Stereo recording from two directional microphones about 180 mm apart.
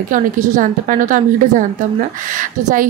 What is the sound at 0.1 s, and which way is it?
Speech, 45° right (ahead or behind).